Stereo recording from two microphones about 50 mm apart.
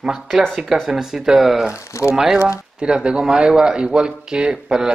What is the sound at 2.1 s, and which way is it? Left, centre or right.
Speech, centre.